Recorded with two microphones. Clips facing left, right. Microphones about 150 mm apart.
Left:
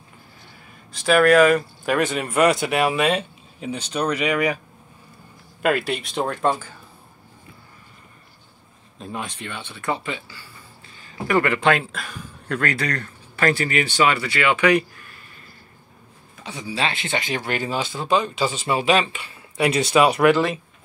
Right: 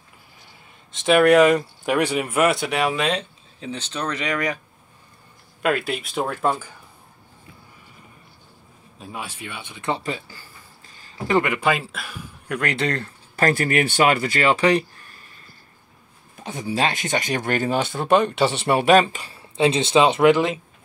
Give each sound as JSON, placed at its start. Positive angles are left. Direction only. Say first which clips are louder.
{"t": 0.9, "sound": "speech", "louder": "right 1 dB", "side_deg": -20}
{"t": 5.6, "sound": "speech", "louder": "left 1 dB", "side_deg": 0}
{"t": 8.9, "sound": "speech", "louder": "left 3 dB", "side_deg": -5}
{"t": 9.8, "sound": "speech", "louder": "even", "side_deg": -25}
{"t": 10.0, "sound": "speech", "louder": "right 2 dB", "side_deg": -40}
{"t": 11.2, "sound": "speech", "louder": "left 1 dB", "side_deg": -20}
{"t": 13.4, "sound": "speech", "louder": "right 1 dB", "side_deg": -45}
{"t": 16.3, "sound": "speech", "louder": "right 3 dB", "side_deg": -50}
{"t": 18.9, "sound": "speech", "louder": "right 5 dB", "side_deg": -40}
{"t": 19.5, "sound": "speech", "louder": "right 1 dB", "side_deg": -25}